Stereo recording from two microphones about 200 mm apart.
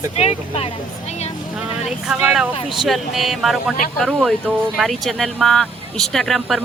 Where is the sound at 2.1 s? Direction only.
5° right (ahead or behind).